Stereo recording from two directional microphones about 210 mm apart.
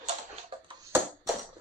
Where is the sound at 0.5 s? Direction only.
25° right (ahead or behind).